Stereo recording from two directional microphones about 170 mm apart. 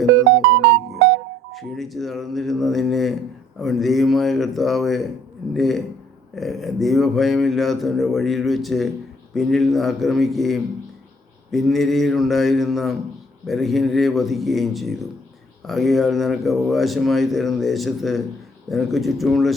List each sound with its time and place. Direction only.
0.5 s music: 80° right
1.5 s speech: centre (ahead or behind)